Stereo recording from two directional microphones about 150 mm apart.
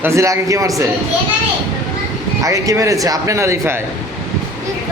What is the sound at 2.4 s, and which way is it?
Speech, 20° right (ahead or behind).